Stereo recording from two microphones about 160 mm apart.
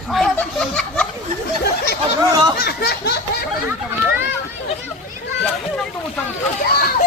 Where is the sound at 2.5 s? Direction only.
85° left.